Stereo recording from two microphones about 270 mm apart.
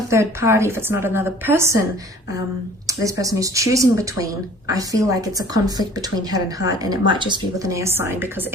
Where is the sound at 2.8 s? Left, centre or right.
Centre.